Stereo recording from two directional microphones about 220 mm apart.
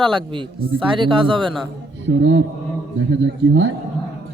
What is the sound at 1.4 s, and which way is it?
Speech, centre (ahead or behind).